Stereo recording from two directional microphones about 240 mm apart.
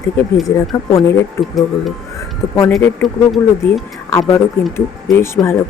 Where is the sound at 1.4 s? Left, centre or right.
Centre.